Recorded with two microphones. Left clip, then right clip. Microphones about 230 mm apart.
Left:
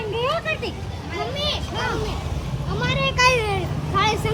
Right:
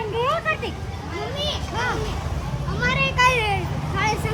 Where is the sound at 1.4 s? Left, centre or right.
Centre.